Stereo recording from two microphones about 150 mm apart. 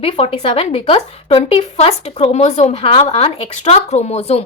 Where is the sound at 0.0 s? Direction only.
40° left (ahead or behind).